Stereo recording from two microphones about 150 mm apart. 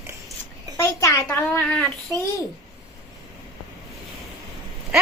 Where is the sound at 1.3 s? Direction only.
10° left (ahead or behind).